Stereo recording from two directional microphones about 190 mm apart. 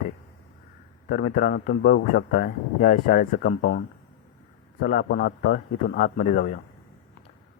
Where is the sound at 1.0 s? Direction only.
55° left (ahead or behind).